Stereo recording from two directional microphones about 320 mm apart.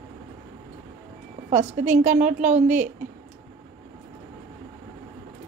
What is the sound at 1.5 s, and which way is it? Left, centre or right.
A woman's voice, right.